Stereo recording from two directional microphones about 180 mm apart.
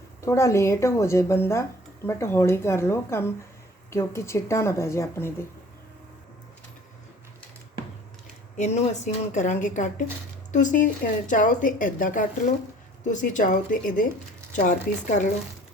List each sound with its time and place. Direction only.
0.2 s a woman's voice: 15° left (ahead or behind)
8.5 s a woman's voice: 40° left (ahead or behind)